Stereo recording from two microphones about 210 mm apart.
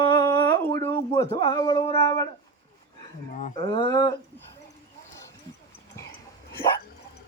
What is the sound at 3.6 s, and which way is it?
Speech, 25° left (ahead or behind).